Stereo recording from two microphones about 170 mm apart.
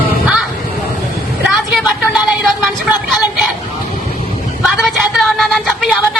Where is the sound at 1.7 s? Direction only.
Centre (ahead or behind).